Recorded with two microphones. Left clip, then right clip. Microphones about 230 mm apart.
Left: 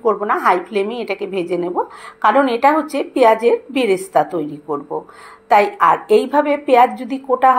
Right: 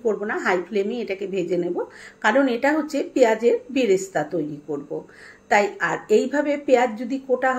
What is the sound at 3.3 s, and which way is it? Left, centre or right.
Speech, centre.